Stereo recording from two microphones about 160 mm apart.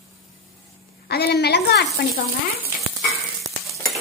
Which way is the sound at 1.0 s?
90° left.